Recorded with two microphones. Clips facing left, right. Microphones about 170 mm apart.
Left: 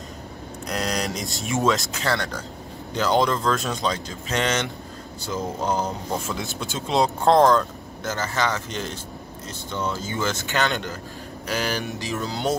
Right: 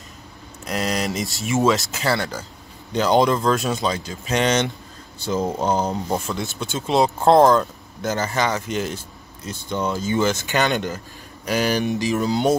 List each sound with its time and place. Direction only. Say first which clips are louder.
0.7 s speech: right 3 dB; 5° right (ahead or behind)
2.9 s speech: right 4 dB; 20° right (ahead or behind)
5.2 s a sound: right 5 dB; 25° right (ahead or behind)
6.2 s speech: right 2 dB; centre (ahead or behind); by 12.5 s 15° right (ahead or behind)